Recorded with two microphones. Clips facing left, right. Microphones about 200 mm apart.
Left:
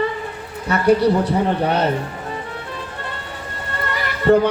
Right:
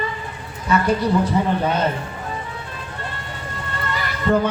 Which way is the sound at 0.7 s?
65° left (ahead or behind).